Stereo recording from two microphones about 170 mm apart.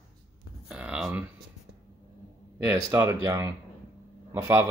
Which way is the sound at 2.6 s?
15° right (ahead or behind).